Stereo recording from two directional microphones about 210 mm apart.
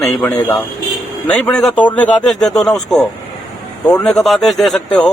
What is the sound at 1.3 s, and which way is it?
Speech, 5° left (ahead or behind).